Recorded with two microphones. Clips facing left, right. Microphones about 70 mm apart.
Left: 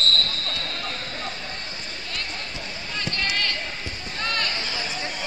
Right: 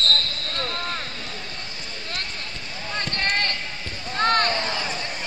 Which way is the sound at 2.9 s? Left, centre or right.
Right.